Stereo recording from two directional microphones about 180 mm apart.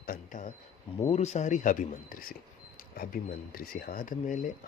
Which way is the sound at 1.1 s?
40° left (ahead or behind).